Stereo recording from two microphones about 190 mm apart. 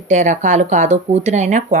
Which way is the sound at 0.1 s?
40° right (ahead or behind).